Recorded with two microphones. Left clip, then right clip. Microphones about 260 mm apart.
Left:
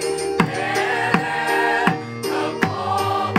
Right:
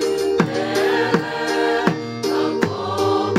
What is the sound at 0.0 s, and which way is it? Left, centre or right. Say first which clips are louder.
Music: right 2 dB; centre.